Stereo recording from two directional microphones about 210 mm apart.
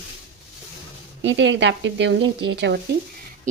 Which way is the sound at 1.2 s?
60° right (ahead or behind).